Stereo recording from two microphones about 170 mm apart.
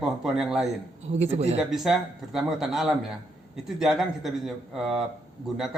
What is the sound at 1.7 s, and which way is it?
Speech, centre (ahead or behind).